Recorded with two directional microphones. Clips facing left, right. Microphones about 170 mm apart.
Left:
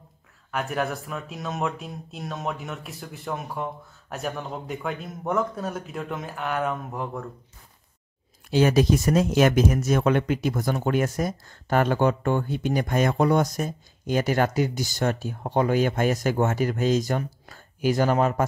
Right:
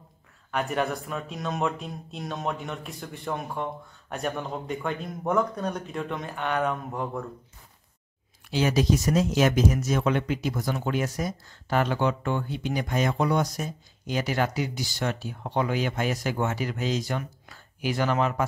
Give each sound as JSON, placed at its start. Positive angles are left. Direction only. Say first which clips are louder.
{"t": 0.5, "sound": "speech", "louder": "even", "side_deg": 0}
{"t": 8.5, "sound": "speech", "louder": "left 4 dB", "side_deg": 50}